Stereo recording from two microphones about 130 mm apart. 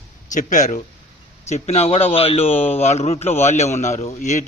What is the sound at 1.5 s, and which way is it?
A man's voice, 55° left (ahead or behind).